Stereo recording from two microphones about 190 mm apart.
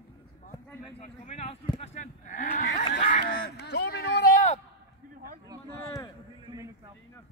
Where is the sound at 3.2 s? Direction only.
60° left (ahead or behind).